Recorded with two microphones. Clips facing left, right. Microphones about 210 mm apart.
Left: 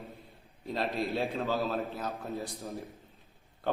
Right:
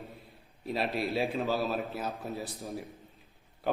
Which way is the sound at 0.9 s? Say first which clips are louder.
Even; 15° left (ahead or behind).